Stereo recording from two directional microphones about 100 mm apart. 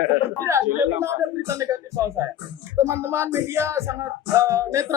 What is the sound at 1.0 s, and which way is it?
Speech, 30° right (ahead or behind).